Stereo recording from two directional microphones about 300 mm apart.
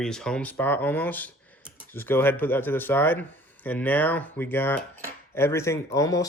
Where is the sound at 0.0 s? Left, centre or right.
Centre.